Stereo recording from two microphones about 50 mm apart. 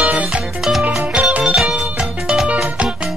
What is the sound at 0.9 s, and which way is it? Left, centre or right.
Music, centre.